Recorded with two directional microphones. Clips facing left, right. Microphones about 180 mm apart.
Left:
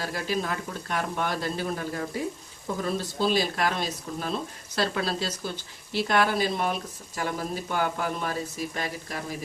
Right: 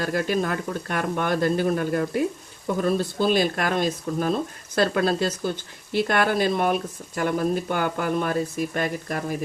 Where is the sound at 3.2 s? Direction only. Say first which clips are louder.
Right 2 dB; 55° right (ahead or behind).